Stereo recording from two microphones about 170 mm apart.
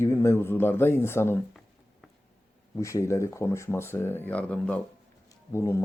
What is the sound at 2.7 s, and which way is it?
Speech, 20° left (ahead or behind).